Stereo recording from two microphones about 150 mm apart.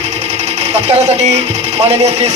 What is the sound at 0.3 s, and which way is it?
Speech, 45° right (ahead or behind).